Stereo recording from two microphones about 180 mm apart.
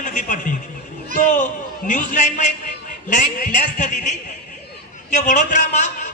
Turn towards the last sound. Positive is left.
turn(degrees=40)  # may be behind; listen again after turning